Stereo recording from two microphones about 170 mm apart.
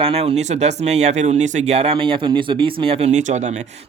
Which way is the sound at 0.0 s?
35° right (ahead or behind).